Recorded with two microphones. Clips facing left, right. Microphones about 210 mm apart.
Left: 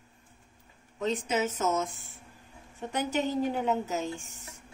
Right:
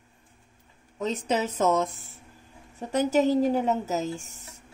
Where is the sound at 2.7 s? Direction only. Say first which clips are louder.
Right 7 dB; 40° right (ahead or behind).